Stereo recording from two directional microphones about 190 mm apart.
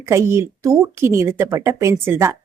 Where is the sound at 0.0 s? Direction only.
15° right (ahead or behind).